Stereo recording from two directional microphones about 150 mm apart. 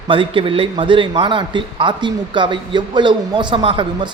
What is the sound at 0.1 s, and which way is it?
A man's voice, 35° right (ahead or behind).